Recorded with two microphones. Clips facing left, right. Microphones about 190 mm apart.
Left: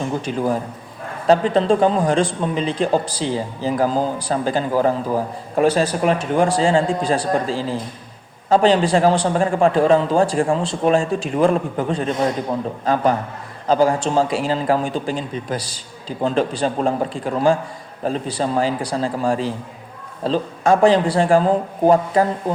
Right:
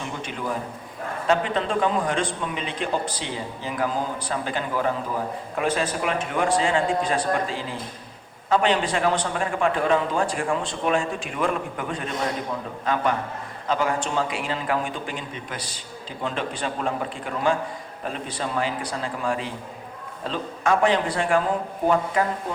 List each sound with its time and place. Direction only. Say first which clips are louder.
0.0 s a man's voice: left 9 dB; 35° left (ahead or behind)